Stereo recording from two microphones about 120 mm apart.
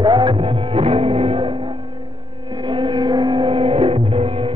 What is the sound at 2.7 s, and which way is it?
Music, 40° right (ahead or behind).